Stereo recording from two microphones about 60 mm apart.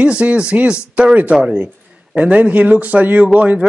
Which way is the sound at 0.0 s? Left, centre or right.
Centre.